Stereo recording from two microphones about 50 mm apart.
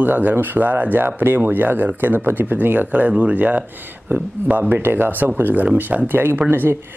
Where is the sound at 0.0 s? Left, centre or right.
Right.